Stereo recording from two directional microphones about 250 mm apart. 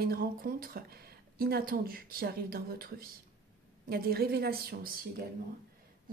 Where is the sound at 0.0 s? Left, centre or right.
Right.